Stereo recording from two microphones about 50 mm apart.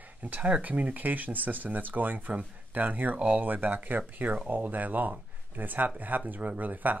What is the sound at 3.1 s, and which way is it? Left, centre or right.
Speech, centre.